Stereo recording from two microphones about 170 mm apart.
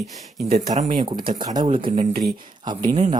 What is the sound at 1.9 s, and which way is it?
Speech, 60° right (ahead or behind).